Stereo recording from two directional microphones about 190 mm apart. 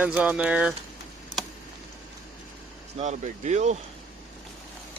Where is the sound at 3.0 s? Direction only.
40° right (ahead or behind).